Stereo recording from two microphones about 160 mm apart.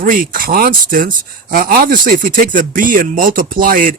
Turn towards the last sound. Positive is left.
turn(degrees=-60)  # may be behind; listen again after turning